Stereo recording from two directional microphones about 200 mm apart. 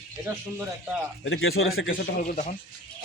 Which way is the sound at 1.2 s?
80° left.